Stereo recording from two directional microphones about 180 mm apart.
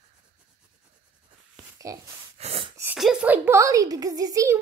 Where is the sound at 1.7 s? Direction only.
20° right (ahead or behind).